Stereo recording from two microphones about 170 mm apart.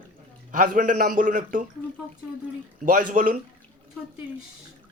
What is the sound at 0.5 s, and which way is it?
Speech, 50° right (ahead or behind).